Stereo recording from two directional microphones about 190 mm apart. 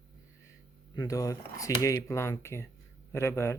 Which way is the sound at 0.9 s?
20° left (ahead or behind).